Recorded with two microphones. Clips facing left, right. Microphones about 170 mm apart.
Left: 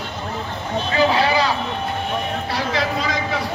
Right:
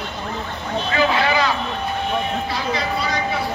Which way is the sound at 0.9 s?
35° left (ahead or behind).